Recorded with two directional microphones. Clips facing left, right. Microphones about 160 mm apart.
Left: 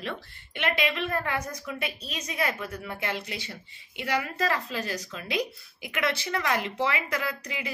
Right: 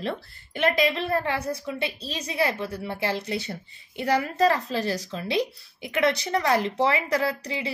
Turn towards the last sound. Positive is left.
turn(degrees=-30)  # may be behind; listen again after turning